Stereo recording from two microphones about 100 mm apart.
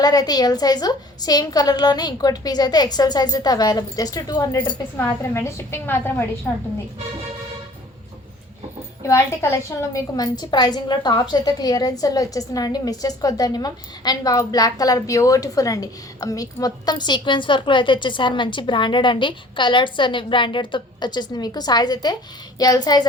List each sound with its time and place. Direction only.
0.0 s a woman's voice: 40° left (ahead or behind)
4.9 s a woman's voice: 25° left (ahead or behind)
9.0 s a woman's voice: 30° left (ahead or behind)
10.2 s a woman's voice: 45° left (ahead or behind)